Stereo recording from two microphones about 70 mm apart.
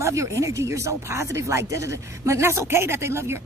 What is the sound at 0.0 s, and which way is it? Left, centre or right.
A woman's voice, right.